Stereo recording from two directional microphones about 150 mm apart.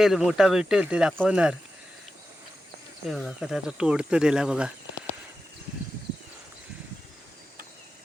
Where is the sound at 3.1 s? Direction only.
Centre (ahead or behind).